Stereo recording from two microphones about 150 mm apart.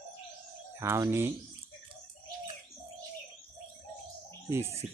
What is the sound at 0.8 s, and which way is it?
Speech, 20° right (ahead or behind).